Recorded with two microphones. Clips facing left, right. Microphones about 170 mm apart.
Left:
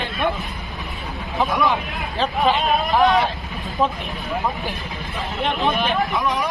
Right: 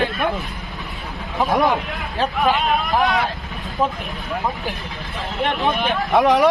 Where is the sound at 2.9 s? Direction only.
20° left (ahead or behind).